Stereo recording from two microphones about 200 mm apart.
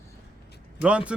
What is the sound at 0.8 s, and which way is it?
Speech, 5° right (ahead or behind).